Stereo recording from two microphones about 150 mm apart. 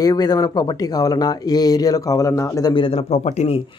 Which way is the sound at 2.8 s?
40° left (ahead or behind).